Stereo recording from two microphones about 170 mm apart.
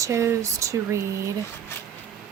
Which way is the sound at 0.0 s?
20° right (ahead or behind).